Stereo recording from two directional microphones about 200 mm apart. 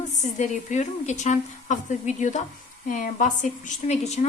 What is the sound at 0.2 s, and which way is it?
Speech, 35° left (ahead or behind).